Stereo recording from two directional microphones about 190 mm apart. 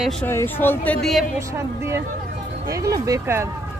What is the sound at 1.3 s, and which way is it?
Speech, 15° right (ahead or behind).